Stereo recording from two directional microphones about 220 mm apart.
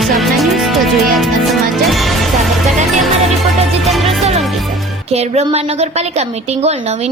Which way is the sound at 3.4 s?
Centre (ahead or behind).